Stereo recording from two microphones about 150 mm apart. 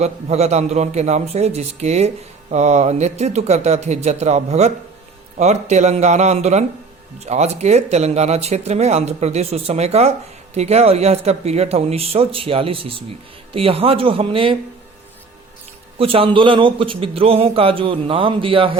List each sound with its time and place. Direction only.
0.0 s speech: 45° right (ahead or behind)
16.0 s speech: 40° right (ahead or behind)